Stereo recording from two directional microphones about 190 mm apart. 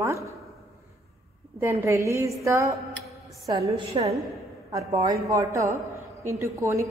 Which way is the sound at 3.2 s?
20° right (ahead or behind).